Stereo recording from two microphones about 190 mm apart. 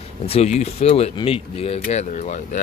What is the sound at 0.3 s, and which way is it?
Speech, 35° left (ahead or behind).